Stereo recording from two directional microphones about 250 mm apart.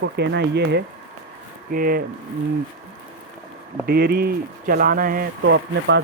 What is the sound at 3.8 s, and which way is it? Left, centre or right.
Speech, right.